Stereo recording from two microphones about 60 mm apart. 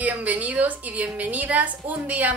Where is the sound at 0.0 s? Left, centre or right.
Right.